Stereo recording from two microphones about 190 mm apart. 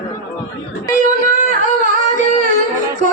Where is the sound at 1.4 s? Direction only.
40° left (ahead or behind).